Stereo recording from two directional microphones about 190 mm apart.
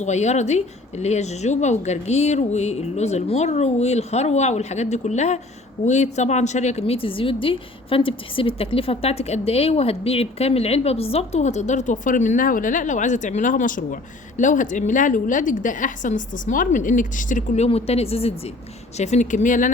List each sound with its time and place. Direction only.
0.0 s a woman's voice: 35° left (ahead or behind)